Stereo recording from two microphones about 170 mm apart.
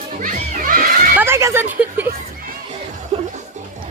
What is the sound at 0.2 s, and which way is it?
Music, 55° right (ahead or behind).